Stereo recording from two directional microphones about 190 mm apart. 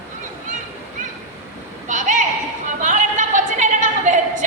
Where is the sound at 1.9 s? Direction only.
40° right (ahead or behind).